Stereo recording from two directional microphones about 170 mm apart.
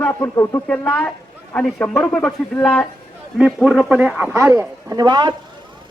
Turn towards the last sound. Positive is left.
turn(degrees=-25)  # may be behind; listen again after turning